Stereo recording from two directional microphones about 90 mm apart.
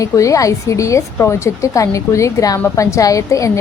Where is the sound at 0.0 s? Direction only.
35° left (ahead or behind).